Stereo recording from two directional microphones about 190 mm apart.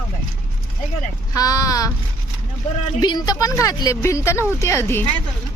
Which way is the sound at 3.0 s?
20° left (ahead or behind).